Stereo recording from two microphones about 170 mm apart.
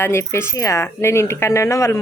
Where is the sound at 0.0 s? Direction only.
15° left (ahead or behind).